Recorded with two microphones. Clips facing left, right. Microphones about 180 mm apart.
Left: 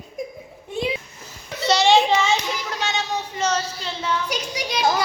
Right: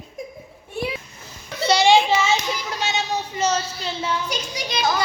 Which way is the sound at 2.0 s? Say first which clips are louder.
Left 1 dB; 5° right (ahead or behind).